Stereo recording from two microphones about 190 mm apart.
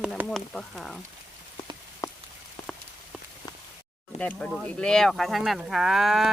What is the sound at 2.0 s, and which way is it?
Rain on surface, 20° left (ahead or behind).